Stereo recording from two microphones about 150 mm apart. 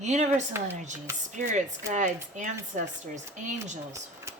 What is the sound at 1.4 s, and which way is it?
Speech, 55° right (ahead or behind).